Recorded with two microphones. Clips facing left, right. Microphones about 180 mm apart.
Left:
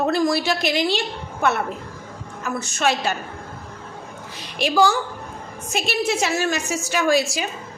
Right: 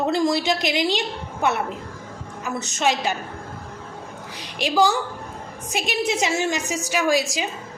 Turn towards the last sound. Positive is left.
turn(degrees=-15)  # may be behind; listen again after turning